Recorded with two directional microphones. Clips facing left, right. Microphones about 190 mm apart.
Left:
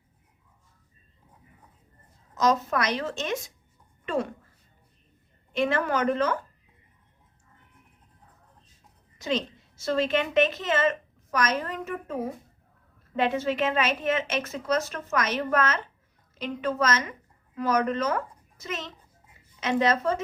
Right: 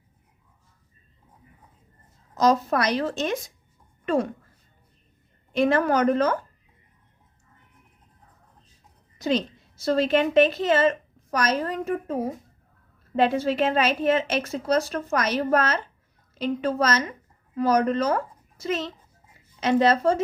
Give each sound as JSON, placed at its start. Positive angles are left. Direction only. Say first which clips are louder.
{"t": 2.3, "sound": "a woman's voice", "louder": "right 3 dB", "side_deg": -35}
{"t": 5.5, "sound": "a woman's voice", "louder": "right 5 dB", "side_deg": -40}
{"t": 9.1, "sound": "a sound", "louder": "right 4 dB", "side_deg": -35}
{"t": 9.8, "sound": "a woman's voice", "louder": "right 4 dB", "side_deg": -35}